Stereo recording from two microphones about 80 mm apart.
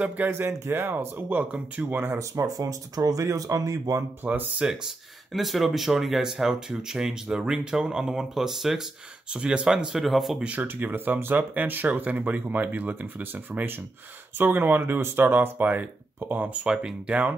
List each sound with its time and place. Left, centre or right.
0.3 s speech: right
2.1 s speech: right
4.2 s speech: right
5.3 s speech: centre
9.9 s speech: centre
10.4 s speech: centre